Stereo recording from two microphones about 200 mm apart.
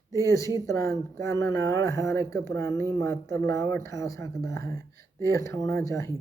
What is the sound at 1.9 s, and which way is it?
Speech, 15° left (ahead or behind).